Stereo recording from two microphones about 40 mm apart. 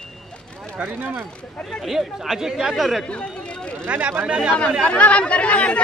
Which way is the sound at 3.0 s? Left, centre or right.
Left.